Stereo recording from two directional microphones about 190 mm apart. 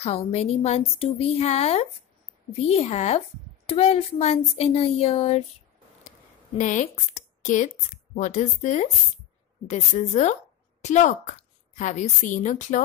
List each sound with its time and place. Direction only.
0.0 s a woman's voice: 30° left (ahead or behind)
6.6 s a woman's voice: 40° left (ahead or behind)